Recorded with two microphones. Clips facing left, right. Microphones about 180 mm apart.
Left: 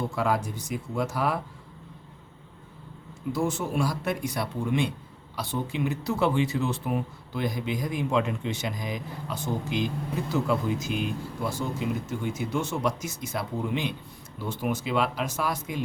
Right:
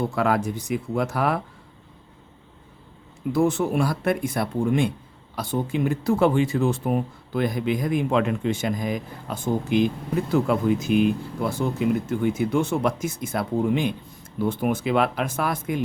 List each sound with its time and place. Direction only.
0.2 s speech: 60° right (ahead or behind)
3.3 s speech: 60° right (ahead or behind)